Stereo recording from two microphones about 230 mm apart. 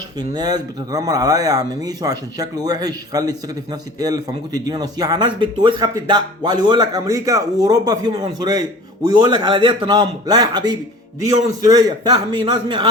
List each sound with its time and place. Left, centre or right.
0.2 s a man's voice: centre